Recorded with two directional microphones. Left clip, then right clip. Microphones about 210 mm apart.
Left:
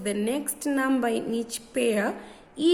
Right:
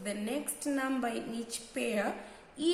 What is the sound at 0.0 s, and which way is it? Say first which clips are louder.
A woman's voice: left 8 dB; 50° left (ahead or behind).